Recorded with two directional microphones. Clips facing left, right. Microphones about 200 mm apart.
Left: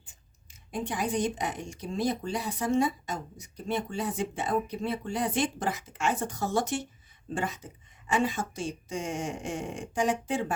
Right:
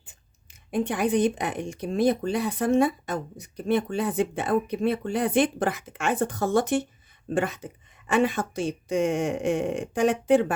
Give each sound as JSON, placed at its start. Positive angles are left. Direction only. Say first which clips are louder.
{"t": 0.7, "sound": "speech", "louder": "right 7 dB", "side_deg": -60}